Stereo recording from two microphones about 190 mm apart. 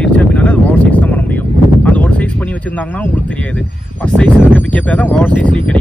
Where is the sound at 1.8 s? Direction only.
5° left (ahead or behind).